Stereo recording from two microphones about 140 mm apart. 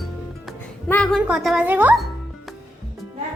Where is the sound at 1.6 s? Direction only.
15° right (ahead or behind).